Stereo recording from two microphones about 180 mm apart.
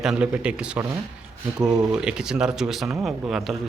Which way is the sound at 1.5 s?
20° right (ahead or behind).